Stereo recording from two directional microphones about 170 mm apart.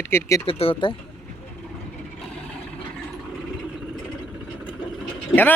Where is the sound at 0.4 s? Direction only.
30° left (ahead or behind).